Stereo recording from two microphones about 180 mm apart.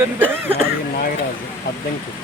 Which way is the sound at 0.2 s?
10° right (ahead or behind).